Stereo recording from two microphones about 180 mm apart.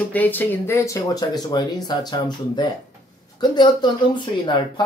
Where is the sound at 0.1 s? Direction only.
10° left (ahead or behind).